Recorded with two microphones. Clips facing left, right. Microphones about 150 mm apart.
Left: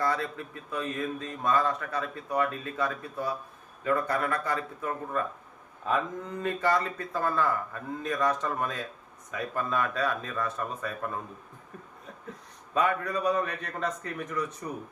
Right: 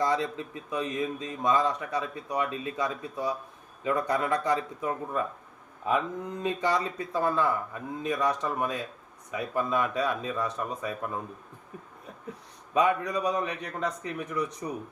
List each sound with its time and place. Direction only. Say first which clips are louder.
0.0 s a man's voice: right 2 dB; 20° right (ahead or behind)
12.7 s a man's voice: right 2 dB; 15° right (ahead or behind)